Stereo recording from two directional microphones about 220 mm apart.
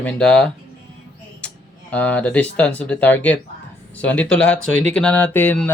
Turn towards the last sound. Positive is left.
turn(degrees=10)  # may be behind; listen again after turning